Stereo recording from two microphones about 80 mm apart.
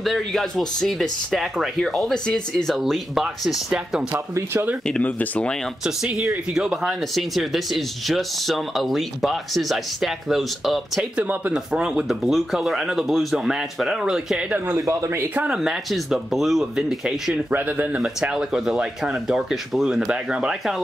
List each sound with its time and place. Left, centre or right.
0.0 s speech: centre
4.8 s speech: centre
5.9 s speech: centre
11.1 s speech: centre
11.5 s speech: centre
14.8 s speech: right
15.3 s speech: centre
17.5 s speech: right
18.0 s speech: centre